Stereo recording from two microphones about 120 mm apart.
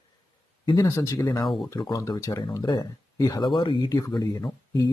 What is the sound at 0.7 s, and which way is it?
Speech, 30° left (ahead or behind).